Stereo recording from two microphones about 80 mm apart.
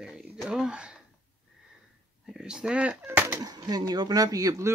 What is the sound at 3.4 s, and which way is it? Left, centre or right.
Speech, right.